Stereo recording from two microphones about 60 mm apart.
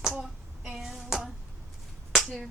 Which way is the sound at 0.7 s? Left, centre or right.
Centre.